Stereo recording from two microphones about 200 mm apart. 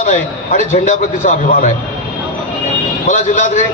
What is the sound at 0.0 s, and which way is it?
A man's voice, 35° left (ahead or behind).